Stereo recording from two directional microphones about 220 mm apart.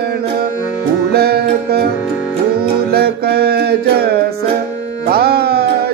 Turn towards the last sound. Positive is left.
turn(degrees=-45)  # may be behind; listen again after turning